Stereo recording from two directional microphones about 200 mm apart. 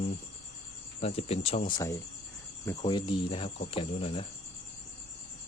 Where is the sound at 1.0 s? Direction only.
30° left (ahead or behind).